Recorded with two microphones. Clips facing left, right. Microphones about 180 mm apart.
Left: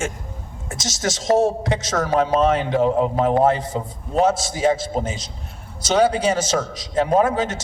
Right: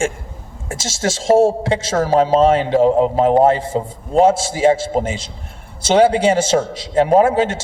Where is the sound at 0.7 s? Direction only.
30° right (ahead or behind).